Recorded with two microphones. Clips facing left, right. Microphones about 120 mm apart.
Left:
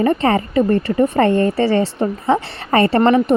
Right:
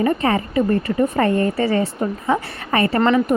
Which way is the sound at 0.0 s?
35° left (ahead or behind).